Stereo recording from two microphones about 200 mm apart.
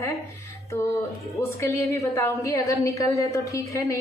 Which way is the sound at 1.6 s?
15° left (ahead or behind).